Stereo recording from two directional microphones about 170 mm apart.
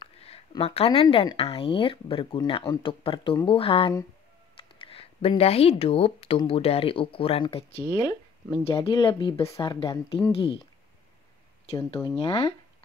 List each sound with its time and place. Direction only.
0.0 s speech: 30° left (ahead or behind)
11.7 s speech: 25° left (ahead or behind)